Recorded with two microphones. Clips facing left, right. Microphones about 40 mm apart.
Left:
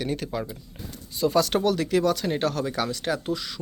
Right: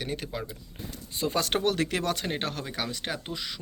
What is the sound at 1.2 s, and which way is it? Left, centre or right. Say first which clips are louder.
Speech: left 5 dB; right.